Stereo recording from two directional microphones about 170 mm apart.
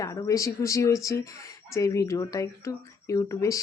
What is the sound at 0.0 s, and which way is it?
A child's voice, 20° left (ahead or behind).